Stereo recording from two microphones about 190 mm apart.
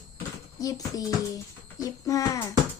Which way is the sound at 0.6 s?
20° left (ahead or behind).